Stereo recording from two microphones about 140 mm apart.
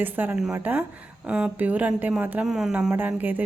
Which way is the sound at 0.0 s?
15° right (ahead or behind).